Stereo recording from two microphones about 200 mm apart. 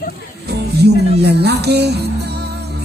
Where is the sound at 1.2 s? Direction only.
55° right (ahead or behind).